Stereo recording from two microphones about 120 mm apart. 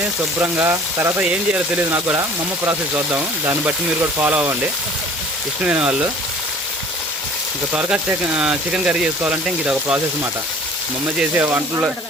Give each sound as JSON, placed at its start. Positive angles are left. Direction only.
{"t": 0.3, "sound": "speech", "side_deg": -15}
{"t": 5.6, "sound": "speech", "side_deg": -10}
{"t": 7.7, "sound": "speech", "side_deg": -10}
{"t": 11.2, "sound": "speech", "side_deg": -15}